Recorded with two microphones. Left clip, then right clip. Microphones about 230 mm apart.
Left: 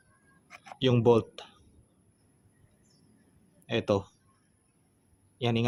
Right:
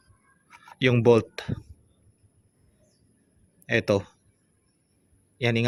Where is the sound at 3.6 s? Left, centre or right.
Right.